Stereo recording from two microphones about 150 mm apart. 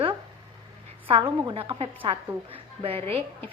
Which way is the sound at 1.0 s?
35° right (ahead or behind).